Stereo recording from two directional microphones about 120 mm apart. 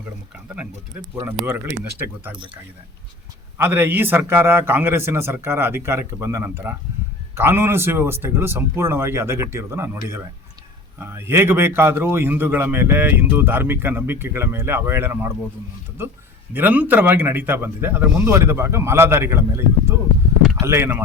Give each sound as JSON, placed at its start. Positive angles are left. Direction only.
{"t": 0.4, "sound": "a man's voice", "side_deg": -10}
{"t": 3.6, "sound": "a man's voice", "side_deg": -15}
{"t": 16.5, "sound": "a man's voice", "side_deg": -15}